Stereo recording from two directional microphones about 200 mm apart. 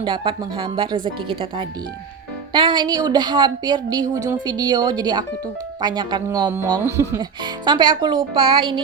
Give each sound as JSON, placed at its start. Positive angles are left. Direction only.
{"t": 0.0, "sound": "speech", "side_deg": -25}
{"t": 2.5, "sound": "speech", "side_deg": -25}